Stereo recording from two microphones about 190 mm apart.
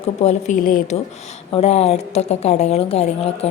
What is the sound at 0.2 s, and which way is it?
Speech, 35° left (ahead or behind).